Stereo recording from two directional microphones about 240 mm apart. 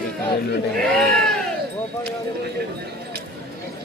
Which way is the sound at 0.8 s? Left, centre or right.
Centre.